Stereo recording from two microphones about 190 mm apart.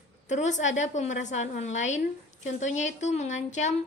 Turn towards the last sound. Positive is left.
turn(degrees=40)  # may be behind; listen again after turning